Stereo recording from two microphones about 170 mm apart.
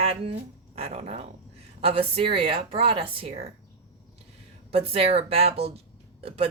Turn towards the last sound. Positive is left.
turn(degrees=-35)  # may be behind; listen again after turning